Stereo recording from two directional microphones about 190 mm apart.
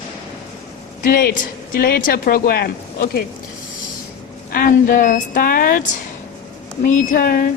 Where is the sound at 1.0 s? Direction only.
50° left (ahead or behind).